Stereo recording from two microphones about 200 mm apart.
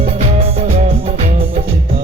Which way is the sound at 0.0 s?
30° right (ahead or behind).